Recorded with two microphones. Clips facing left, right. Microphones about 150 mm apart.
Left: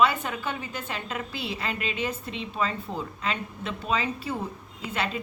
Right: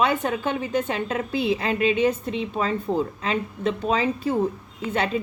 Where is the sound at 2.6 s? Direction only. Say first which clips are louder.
Right 6 dB; 45° right (ahead or behind).